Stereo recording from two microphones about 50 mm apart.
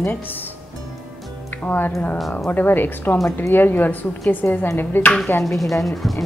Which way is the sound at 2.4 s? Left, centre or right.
Left.